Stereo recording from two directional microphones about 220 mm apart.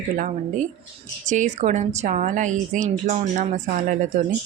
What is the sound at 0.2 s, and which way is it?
A woman's voice, 35° right (ahead or behind).